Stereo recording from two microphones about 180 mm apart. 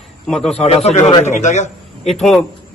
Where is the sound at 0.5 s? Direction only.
35° left (ahead or behind).